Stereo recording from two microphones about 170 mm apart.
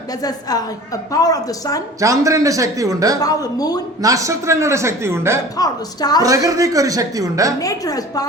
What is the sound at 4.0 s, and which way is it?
A man's voice, 20° right (ahead or behind).